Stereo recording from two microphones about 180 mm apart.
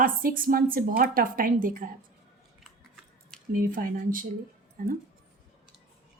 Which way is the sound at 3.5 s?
50° right (ahead or behind).